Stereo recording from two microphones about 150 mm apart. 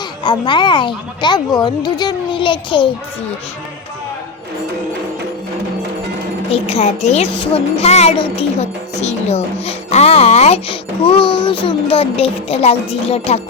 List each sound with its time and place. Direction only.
0.3 s a woman's voice: 30° left (ahead or behind)
6.5 s a woman's voice: 40° left (ahead or behind)